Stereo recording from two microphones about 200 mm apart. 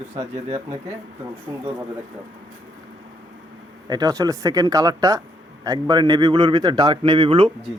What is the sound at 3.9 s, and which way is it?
A man's voice, 20° right (ahead or behind).